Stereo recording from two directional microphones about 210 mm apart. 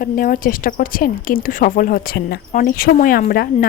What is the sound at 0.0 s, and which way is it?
Speech, 40° left (ahead or behind).